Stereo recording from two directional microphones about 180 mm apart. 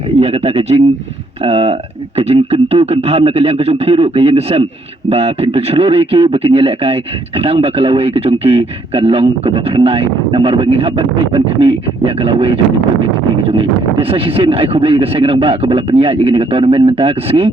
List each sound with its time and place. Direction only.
0.2 s speech: 35° right (ahead or behind)